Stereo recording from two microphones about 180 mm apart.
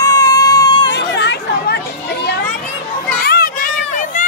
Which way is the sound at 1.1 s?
70° left (ahead or behind).